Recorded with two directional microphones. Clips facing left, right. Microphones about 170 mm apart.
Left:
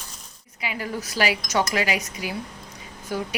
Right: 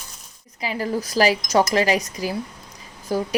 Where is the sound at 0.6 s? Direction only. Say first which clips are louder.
Right 5 dB; 35° right (ahead or behind).